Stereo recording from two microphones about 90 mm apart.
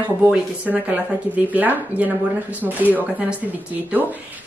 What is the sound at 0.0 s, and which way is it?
Speech, 15° right (ahead or behind).